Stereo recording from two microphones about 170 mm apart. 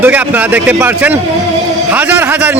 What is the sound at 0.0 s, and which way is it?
A man's voice, 10° right (ahead or behind).